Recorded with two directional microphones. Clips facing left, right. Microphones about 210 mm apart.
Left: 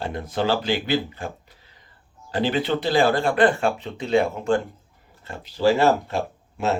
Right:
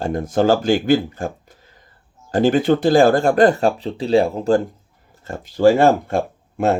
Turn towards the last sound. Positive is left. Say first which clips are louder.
# right 6 dB
turn(degrees=-50)  # may be behind; listen again after turning